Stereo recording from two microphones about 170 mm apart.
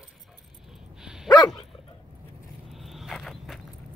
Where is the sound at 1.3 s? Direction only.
25° left (ahead or behind).